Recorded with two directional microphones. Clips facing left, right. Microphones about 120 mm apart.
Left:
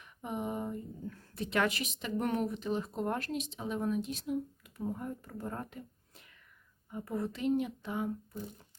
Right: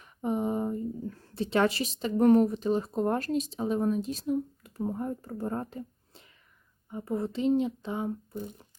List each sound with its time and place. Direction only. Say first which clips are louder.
0.0 s speech: right 8 dB; 35° right (ahead or behind)